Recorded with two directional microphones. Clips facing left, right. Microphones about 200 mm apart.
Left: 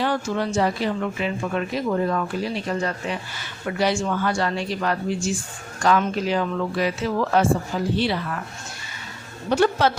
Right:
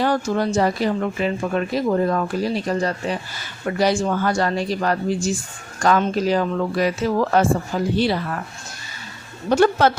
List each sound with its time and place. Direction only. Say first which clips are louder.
0.0 s speech: right 4 dB; 40° right (ahead or behind)
9.5 s speech: right 3 dB; 50° right (ahead or behind)